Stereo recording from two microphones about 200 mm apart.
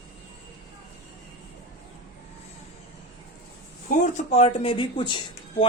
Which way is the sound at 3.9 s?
35° left (ahead or behind).